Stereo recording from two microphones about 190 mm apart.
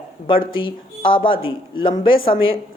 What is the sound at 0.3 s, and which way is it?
Speech, 25° left (ahead or behind).